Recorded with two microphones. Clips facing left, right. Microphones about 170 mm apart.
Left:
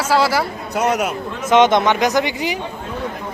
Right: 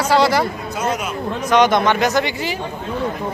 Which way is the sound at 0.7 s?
70° left (ahead or behind).